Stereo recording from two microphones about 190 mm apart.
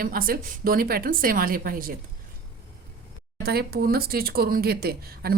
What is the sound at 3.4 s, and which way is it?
Speech, 55° right (ahead or behind).